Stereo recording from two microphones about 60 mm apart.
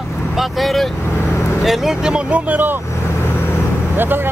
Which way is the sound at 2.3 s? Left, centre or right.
Right.